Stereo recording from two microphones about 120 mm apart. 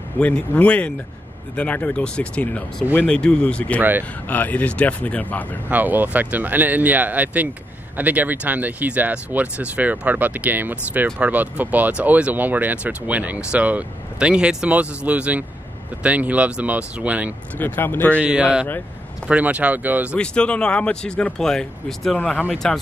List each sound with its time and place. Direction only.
0.2 s speech: 10° left (ahead or behind)
5.7 s speech: 15° right (ahead or behind)
17.6 s speech: 15° left (ahead or behind)
18.2 s speech: 10° right (ahead or behind)
20.2 s speech: 10° left (ahead or behind)